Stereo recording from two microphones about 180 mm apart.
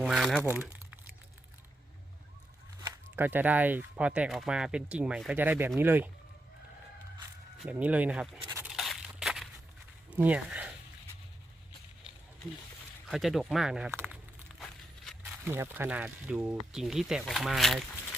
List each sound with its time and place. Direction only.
0.0 s speech: centre (ahead or behind)
2.8 s speech: 15° right (ahead or behind)
7.6 s speech: 10° right (ahead or behind)
8.4 s a sound: 15° right (ahead or behind)
8.7 s crushing: centre (ahead or behind)
10.1 s speech: 10° right (ahead or behind)
13.1 s speech: centre (ahead or behind)
14.6 s a sound: 5° left (ahead or behind)
15.2 s speech: 15° right (ahead or behind)